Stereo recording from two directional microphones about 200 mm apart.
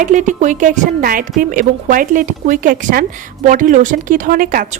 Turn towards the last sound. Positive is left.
turn(degrees=-45)  # may be behind; listen again after turning